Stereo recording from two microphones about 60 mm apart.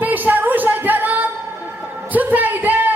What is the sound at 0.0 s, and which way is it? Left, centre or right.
Music, right.